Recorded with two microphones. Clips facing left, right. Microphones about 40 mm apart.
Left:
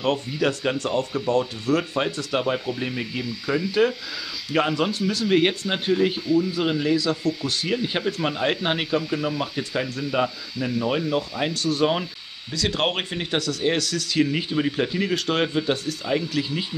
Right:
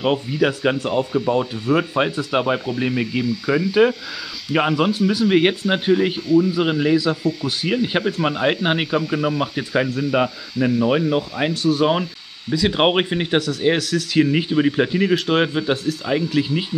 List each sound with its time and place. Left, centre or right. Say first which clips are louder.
0.0 s speech: right 4 dB; centre
12.4 s speech: right 7 dB; centre